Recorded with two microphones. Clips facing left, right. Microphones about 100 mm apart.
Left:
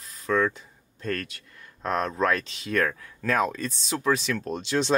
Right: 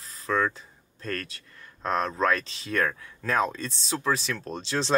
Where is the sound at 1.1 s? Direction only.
35° right (ahead or behind).